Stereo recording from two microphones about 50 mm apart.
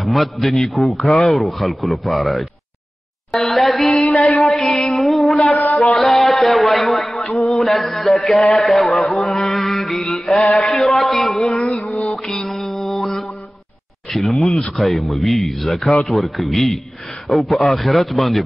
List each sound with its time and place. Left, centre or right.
0.0 s a man's voice: centre
3.3 s a sound: centre
4.4 s music: centre
5.8 s a sound: centre
8.2 s a man's voice: centre
9.5 s mantra: centre
9.9 s mantra: centre
10.6 s a sound: centre
11.7 s mantra: left
12.4 s mantra: centre
14.1 s a sound: centre
14.8 s a man's voice: centre